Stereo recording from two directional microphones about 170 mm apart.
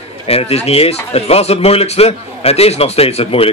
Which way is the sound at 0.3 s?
35° left (ahead or behind).